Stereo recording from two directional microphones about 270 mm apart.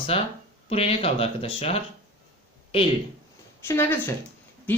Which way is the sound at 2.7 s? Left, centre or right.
Left.